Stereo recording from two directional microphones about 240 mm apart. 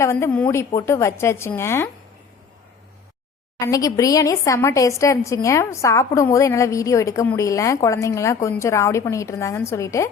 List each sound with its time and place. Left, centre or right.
0.0 s speech: centre
3.6 s speech: centre